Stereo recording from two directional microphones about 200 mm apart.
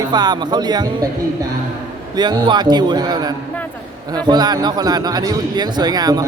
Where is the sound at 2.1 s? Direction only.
20° right (ahead or behind).